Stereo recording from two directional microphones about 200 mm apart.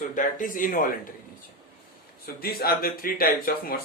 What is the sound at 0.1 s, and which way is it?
Speech, 40° left (ahead or behind).